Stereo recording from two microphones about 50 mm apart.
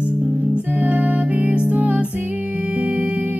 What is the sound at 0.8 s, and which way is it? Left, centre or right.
Music, right.